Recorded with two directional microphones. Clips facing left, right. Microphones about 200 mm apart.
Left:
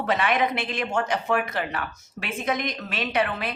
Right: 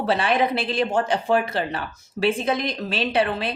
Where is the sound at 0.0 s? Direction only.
30° right (ahead or behind).